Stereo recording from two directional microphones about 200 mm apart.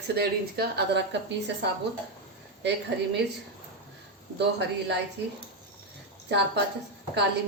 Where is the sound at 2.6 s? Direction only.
60° right (ahead or behind).